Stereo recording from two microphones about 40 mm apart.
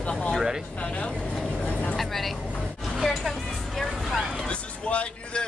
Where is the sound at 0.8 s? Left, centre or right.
Left.